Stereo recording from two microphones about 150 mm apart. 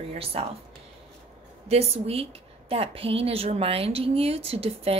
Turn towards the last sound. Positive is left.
turn(degrees=-40)  # may be behind; listen again after turning